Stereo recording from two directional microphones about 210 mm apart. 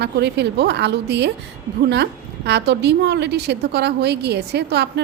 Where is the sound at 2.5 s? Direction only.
55° right (ahead or behind).